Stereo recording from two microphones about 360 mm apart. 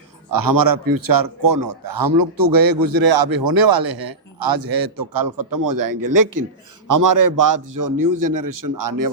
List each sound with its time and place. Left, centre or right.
0.3 s a man's voice: right